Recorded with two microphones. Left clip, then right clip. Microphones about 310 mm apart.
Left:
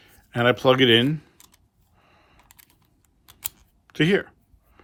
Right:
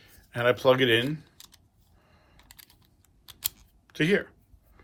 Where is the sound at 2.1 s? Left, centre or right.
Left.